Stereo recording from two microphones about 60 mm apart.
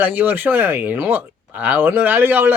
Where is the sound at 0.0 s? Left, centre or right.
Right.